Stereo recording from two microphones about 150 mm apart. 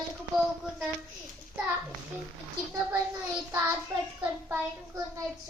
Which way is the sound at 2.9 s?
10° right (ahead or behind).